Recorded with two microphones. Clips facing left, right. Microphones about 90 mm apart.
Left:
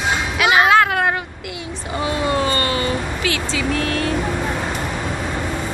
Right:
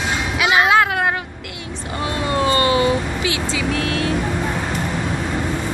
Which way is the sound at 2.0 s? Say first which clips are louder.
Even; centre (ahead or behind).